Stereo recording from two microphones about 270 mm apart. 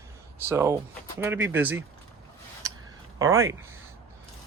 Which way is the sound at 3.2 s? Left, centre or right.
Centre.